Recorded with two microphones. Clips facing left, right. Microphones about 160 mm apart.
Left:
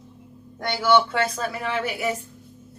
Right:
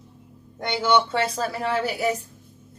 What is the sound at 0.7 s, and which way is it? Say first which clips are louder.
Speech: left 1 dB; 20° right (ahead or behind).